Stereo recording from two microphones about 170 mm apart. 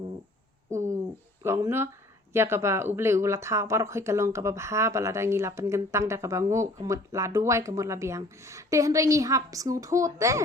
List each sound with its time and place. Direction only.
1.4 s speech: 15° right (ahead or behind)